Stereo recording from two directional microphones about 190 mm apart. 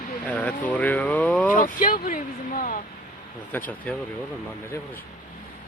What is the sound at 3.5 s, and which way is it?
Speech, 10° left (ahead or behind).